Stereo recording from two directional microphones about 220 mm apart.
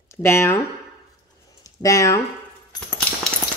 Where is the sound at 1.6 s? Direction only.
15° left (ahead or behind).